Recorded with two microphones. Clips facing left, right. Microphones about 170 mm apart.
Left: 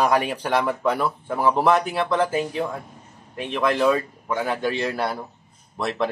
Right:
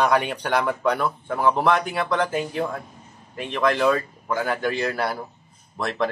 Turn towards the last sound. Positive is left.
turn(degrees=0)  # may be behind; listen again after turning